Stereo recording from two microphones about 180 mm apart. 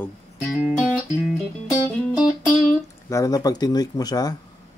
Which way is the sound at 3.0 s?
20° left (ahead or behind).